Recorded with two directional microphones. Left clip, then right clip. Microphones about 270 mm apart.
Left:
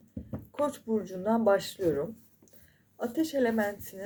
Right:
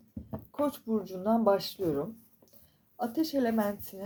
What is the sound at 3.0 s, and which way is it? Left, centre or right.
Speech, right.